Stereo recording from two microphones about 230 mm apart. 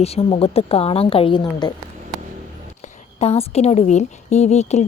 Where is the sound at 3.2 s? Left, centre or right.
Left.